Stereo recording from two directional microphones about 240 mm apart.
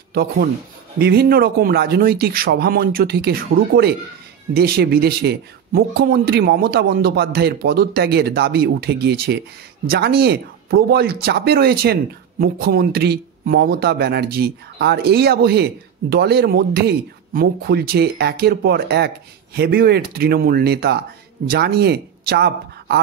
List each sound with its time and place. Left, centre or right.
0.1 s speech: right